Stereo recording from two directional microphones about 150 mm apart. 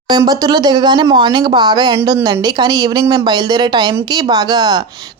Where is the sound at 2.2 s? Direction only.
15° right (ahead or behind).